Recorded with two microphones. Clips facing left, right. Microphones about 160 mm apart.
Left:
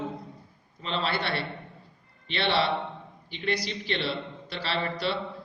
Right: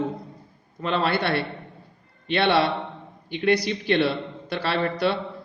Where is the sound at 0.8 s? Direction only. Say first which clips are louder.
Right 6 dB; 55° right (ahead or behind).